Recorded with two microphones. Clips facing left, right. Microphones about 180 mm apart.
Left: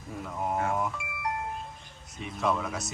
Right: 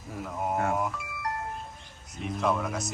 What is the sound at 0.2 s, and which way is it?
Speech, centre (ahead or behind).